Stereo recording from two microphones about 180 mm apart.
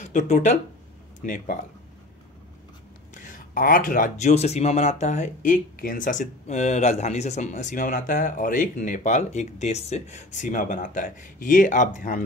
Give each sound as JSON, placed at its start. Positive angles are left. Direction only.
{"t": 0.0, "sound": "speech", "side_deg": 40}
{"t": 3.2, "sound": "speech", "side_deg": 45}